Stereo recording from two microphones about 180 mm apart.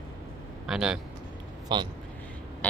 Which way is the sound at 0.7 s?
5° right (ahead or behind).